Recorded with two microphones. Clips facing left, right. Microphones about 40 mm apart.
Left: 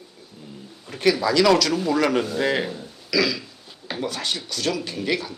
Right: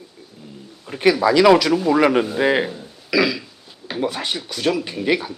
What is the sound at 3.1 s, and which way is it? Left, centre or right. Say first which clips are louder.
Speech: right 4 dB; centre.